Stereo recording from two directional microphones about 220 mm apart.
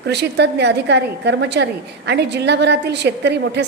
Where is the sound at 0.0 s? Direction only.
50° right (ahead or behind).